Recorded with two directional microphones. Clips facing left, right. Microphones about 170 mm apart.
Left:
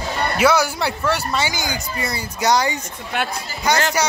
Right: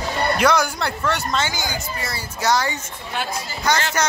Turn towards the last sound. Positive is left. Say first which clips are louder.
# left 1 dB
turn(degrees=10)  # may be behind; listen again after turning